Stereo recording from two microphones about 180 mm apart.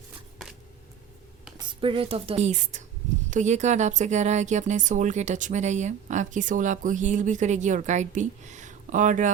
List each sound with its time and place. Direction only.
1.5 s speech: 30° right (ahead or behind); by 9.3 s 45° right (ahead or behind)